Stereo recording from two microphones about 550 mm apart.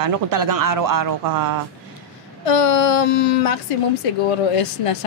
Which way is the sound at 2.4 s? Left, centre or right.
Left.